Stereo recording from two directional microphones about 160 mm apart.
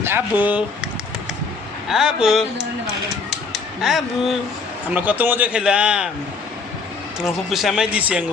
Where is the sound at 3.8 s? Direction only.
Centre (ahead or behind).